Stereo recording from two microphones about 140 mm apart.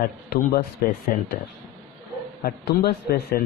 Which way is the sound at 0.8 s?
90° left.